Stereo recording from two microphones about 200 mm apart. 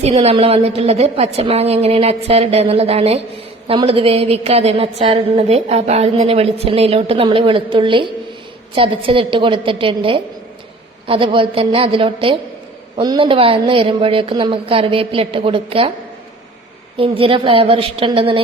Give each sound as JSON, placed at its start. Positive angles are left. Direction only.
{"t": 0.0, "sound": "a woman's voice", "side_deg": -30}
{"t": 17.0, "sound": "a woman's voice", "side_deg": -25}